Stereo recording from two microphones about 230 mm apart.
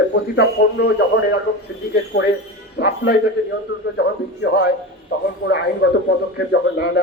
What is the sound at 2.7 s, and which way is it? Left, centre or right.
Speech, left.